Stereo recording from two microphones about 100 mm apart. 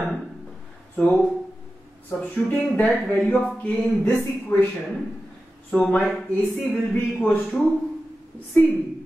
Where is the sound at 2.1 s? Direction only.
15° left (ahead or behind).